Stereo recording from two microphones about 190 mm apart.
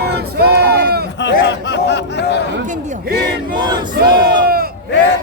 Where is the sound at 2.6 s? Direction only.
40° right (ahead or behind).